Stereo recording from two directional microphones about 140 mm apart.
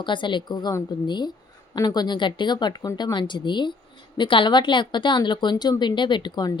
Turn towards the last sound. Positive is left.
turn(degrees=30)  # may be behind; listen again after turning